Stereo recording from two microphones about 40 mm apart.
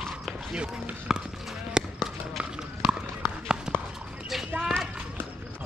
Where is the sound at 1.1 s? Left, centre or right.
Centre.